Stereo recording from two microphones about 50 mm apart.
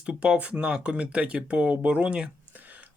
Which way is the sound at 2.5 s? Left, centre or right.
Right.